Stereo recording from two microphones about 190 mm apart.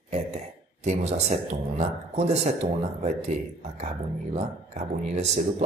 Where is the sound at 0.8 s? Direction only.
35° right (ahead or behind).